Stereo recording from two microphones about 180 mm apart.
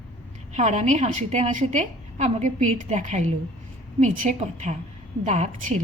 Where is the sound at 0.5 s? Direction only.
40° right (ahead or behind).